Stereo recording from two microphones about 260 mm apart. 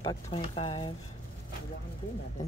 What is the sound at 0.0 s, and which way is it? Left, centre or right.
Speech, centre.